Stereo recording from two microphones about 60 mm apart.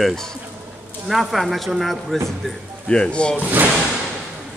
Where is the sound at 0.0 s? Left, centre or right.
Centre.